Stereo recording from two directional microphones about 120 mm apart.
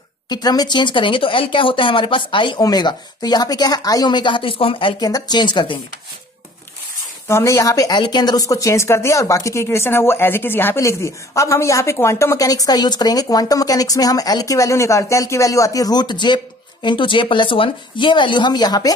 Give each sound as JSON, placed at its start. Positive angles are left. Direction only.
{"t": 0.3, "sound": "speech", "side_deg": 35}
{"t": 5.0, "sound": "speech", "side_deg": 35}
{"t": 7.2, "sound": "speech", "side_deg": 25}